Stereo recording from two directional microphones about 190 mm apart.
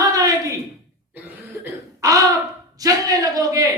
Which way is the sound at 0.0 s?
20° right (ahead or behind).